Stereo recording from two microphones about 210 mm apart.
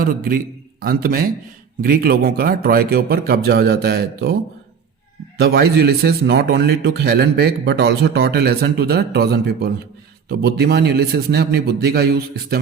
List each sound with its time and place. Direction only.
0.0 s a man's voice: 45° right (ahead or behind)
5.4 s a man's voice: 50° right (ahead or behind)